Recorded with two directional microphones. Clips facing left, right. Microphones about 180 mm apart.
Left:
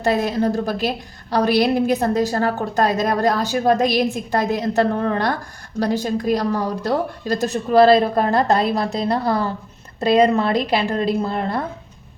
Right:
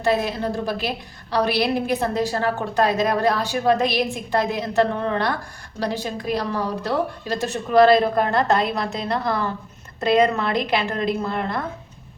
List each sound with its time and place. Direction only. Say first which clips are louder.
0.0 s a woman's voice: left 3 dB; 45° left (ahead or behind)